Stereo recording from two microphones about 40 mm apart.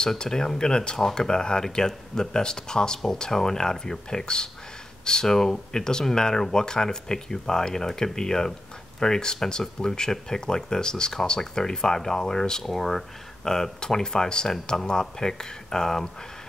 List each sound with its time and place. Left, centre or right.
0.2 s speech: centre